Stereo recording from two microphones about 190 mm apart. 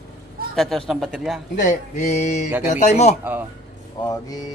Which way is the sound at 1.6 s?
40° left (ahead or behind).